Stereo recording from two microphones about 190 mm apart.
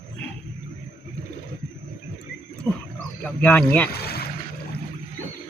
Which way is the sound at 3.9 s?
55° left (ahead or behind).